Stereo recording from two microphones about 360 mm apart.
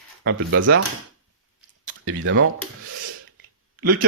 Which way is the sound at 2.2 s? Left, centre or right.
Right.